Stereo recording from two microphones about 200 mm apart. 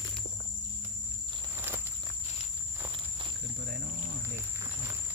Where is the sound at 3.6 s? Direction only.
50° right (ahead or behind).